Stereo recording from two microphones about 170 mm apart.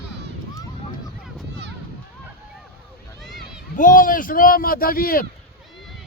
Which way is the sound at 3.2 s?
Centre (ahead or behind).